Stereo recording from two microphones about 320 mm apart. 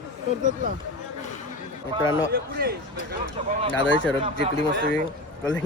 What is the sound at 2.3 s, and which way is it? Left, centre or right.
Speech, right.